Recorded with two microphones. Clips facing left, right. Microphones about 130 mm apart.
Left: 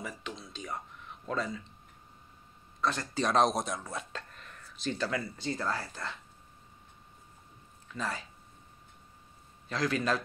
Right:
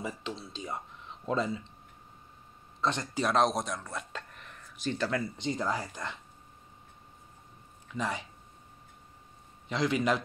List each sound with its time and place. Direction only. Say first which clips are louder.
0.0 s a sound: right 4 dB; 30° right (ahead or behind)
1.2 s speech: right 4 dB; 25° right (ahead or behind)
2.8 s speech: right 1 dB; 25° right (ahead or behind)
3.2 s speech: even; centre (ahead or behind)
4.1 s a sound: right 1 dB; 15° right (ahead or behind)
5.4 s speech: right 2 dB; 15° right (ahead or behind)
7.9 s speech: right 3 dB; 15° right (ahead or behind)
9.7 s a man's voice: right 2 dB; 20° right (ahead or behind)